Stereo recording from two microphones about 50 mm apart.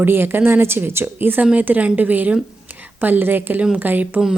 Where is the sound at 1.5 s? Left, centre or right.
Right.